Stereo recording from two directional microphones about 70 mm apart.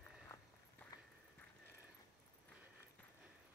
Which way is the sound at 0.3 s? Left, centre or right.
Left.